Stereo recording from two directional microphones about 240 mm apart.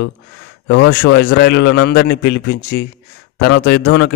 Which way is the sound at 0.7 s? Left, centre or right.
Left.